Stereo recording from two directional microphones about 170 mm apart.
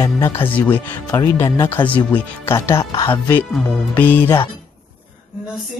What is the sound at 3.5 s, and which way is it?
Speech, 5° left (ahead or behind).